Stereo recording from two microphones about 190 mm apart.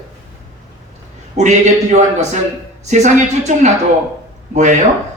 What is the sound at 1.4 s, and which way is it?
Speech, 35° right (ahead or behind).